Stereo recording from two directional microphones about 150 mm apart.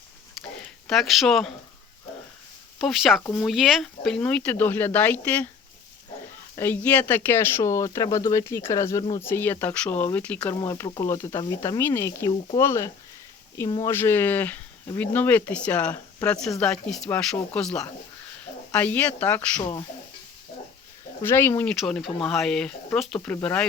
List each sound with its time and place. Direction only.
0.9 s speech: centre (ahead or behind)
2.7 s speech: centre (ahead or behind)
6.6 s speech: 10° left (ahead or behind)
10.5 s speech: 25° left (ahead or behind)
21.2 s speech: 15° left (ahead or behind)
21.8 s speech: centre (ahead or behind)